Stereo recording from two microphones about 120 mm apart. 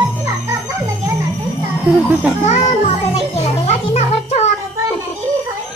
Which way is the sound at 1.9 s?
15° right (ahead or behind).